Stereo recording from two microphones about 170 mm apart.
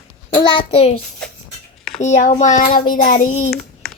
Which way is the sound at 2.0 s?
45° left (ahead or behind).